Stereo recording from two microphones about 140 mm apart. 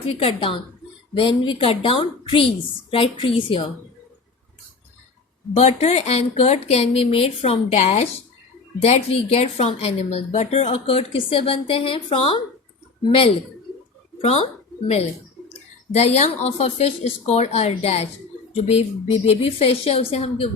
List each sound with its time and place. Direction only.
0.2 s a woman's voice: 40° left (ahead or behind)
5.5 s a woman's voice: 50° left (ahead or behind)
15.9 s speech: 50° left (ahead or behind)